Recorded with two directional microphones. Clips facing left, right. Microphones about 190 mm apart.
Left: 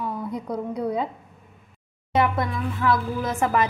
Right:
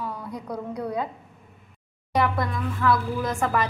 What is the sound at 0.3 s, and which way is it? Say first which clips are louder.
Speech: left 4 dB; 25° left (ahead or behind).